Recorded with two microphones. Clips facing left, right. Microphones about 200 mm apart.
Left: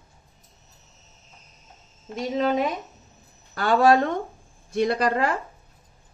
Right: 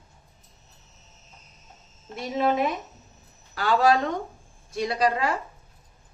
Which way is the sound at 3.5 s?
50° left (ahead or behind).